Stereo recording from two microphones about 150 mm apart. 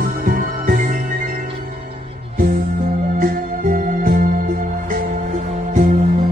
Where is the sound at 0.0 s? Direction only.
65° right (ahead or behind).